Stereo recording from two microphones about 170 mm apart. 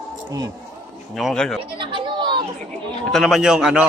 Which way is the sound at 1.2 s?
Centre (ahead or behind).